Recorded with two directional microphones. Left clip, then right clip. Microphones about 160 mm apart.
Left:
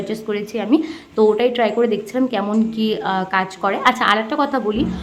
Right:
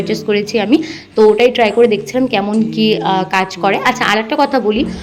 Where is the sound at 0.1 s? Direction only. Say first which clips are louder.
Right 11 dB; 20° right (ahead or behind).